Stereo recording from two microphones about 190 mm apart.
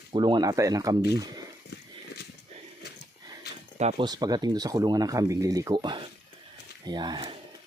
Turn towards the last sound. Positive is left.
turn(degrees=-25)  # may be behind; listen again after turning